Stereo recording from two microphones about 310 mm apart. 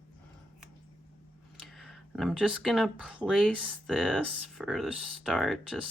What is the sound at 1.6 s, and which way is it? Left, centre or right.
Speech, centre.